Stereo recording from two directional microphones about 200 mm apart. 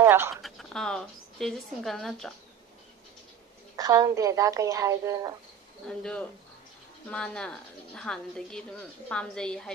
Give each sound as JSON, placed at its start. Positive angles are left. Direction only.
{"t": 0.0, "sound": "speech", "side_deg": -10}
{"t": 0.4, "sound": "speech", "side_deg": 0}
{"t": 3.7, "sound": "a woman's voice", "side_deg": -15}
{"t": 5.9, "sound": "speech", "side_deg": 5}